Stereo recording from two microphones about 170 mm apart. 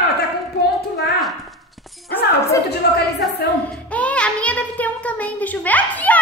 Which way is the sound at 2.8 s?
70° left (ahead or behind).